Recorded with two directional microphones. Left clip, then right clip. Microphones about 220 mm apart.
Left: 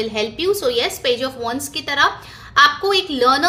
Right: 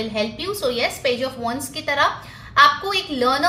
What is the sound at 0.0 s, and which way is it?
A woman's voice, 45° left (ahead or behind).